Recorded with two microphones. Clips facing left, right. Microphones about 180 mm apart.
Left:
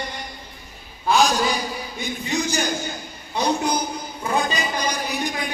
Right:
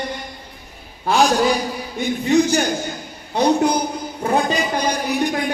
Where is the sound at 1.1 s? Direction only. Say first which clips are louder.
Right 3 dB; 60° right (ahead or behind).